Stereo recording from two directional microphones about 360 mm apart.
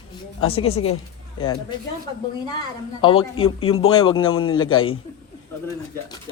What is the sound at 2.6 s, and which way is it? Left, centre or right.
Speech, centre.